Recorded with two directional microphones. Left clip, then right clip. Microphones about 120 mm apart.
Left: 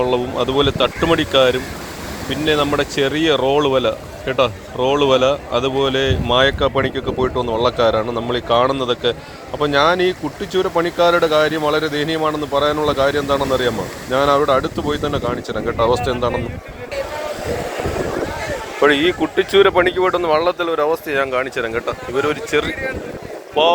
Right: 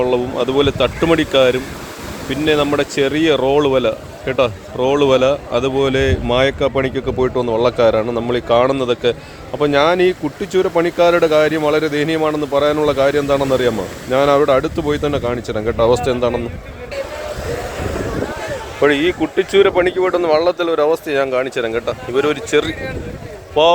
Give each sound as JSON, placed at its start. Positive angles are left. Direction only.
{"t": 0.0, "sound": "speech", "side_deg": -45}
{"t": 18.8, "sound": "speech", "side_deg": -30}
{"t": 20.1, "sound": "speech", "side_deg": -70}